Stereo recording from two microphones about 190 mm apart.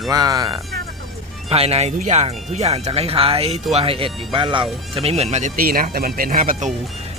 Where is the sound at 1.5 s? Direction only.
30° right (ahead or behind).